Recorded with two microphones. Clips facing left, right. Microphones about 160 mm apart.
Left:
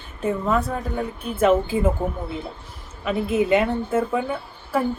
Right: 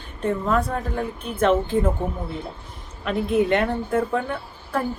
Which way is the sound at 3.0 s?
5° left (ahead or behind).